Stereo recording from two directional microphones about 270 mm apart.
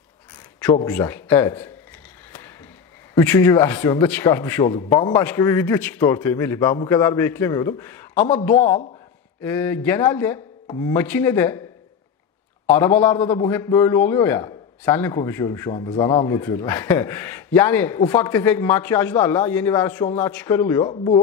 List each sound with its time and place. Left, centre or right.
0.8 s a man's voice: centre
3.2 s a man's voice: centre
9.4 s a man's voice: centre
12.6 s a man's voice: centre